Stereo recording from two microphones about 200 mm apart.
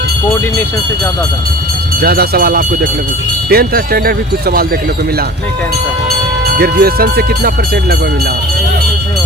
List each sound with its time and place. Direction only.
2.0 s speech: 50° right (ahead or behind)
6.6 s speech: 50° right (ahead or behind)